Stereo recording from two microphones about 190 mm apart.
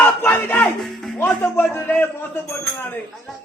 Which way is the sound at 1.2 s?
10° left (ahead or behind).